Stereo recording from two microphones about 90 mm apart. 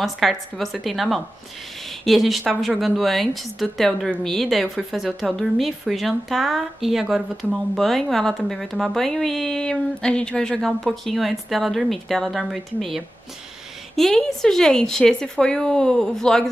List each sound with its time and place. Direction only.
0.0 s a woman's voice: centre (ahead or behind)